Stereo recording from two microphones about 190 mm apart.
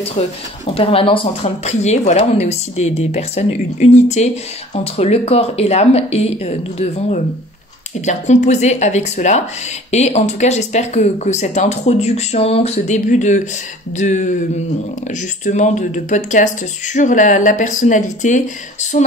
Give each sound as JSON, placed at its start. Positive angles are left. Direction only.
{"t": 0.7, "sound": "speech", "side_deg": 30}